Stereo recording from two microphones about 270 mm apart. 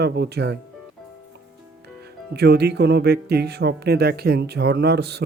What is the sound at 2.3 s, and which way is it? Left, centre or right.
Speech, right.